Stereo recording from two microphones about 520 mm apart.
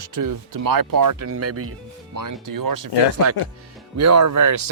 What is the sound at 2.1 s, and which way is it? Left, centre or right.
Speech, right.